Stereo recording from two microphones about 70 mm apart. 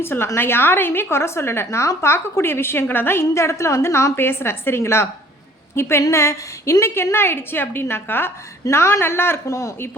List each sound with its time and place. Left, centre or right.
0.0 s a woman's voice: left